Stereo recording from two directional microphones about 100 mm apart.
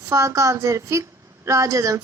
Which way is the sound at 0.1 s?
30° right (ahead or behind).